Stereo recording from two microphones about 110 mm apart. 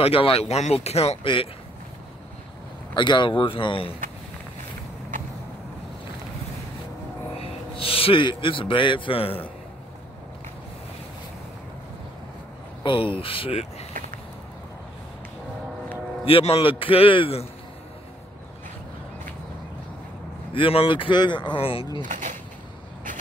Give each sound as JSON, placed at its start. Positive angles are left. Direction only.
{"t": 0.0, "sound": "speech", "side_deg": 60}
{"t": 1.2, "sound": "speech", "side_deg": 50}
{"t": 2.9, "sound": "speech", "side_deg": 45}
{"t": 7.3, "sound": "a man's voice", "side_deg": 60}
{"t": 12.8, "sound": "a man's voice", "side_deg": 50}
{"t": 16.3, "sound": "a man's voice", "side_deg": 60}
{"t": 20.5, "sound": "speech", "side_deg": 55}
{"t": 21.5, "sound": "a man's voice", "side_deg": 60}